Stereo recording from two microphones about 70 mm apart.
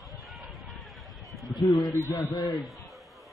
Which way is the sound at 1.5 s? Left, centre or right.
Left.